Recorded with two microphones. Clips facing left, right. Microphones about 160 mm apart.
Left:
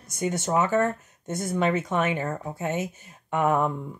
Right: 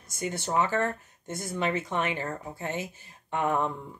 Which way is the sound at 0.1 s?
20° left (ahead or behind).